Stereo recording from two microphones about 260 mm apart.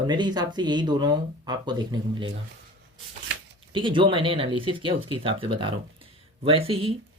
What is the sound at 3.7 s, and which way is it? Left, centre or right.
Speech, centre.